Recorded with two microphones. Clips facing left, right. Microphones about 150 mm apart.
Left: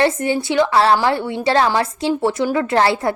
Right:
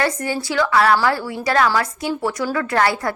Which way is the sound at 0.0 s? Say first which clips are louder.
Left 5 dB; 25° left (ahead or behind).